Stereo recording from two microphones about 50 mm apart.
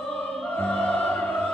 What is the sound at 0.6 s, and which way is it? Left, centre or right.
Opera, left.